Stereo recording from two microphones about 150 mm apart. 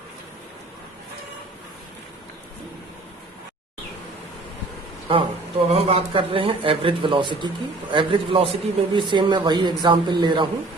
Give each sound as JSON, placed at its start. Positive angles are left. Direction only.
{"t": 5.1, "sound": "a man's voice", "side_deg": -35}